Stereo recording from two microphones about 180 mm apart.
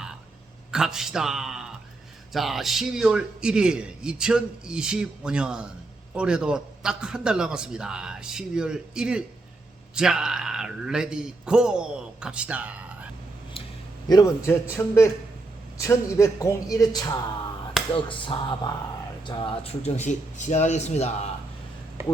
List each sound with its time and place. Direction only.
0.7 s a man's voice: 5° right (ahead or behind)
14.1 s a man's voice: 20° left (ahead or behind); by 21.1 s 40° left (ahead or behind)